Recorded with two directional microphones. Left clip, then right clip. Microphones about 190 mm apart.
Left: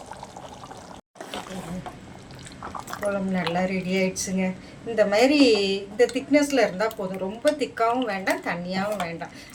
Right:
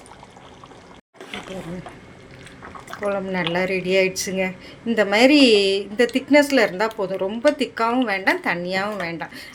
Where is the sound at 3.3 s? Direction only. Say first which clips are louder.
Right 4 dB; 55° right (ahead or behind).